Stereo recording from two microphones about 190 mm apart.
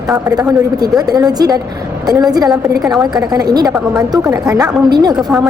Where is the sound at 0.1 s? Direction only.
20° right (ahead or behind).